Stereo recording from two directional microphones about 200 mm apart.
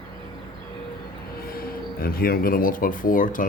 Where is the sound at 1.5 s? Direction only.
50° left (ahead or behind).